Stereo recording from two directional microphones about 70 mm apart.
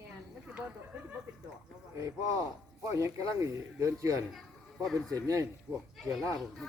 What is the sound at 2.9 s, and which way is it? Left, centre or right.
Speech, right.